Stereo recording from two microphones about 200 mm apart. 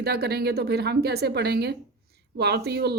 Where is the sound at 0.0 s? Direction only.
55° right (ahead or behind).